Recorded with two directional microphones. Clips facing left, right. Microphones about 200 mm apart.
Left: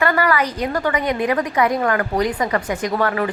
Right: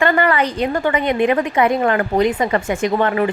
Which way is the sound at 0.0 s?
25° right (ahead or behind).